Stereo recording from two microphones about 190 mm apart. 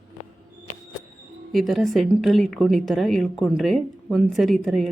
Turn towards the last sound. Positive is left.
turn(degrees=0)  # may be behind; listen again after turning